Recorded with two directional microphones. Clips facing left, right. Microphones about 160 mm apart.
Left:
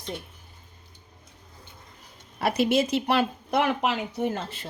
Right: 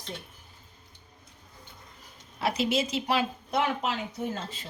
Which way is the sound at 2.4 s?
55° left (ahead or behind).